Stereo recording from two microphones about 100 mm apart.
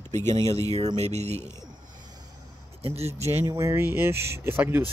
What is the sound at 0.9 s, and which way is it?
Speech, 90° right.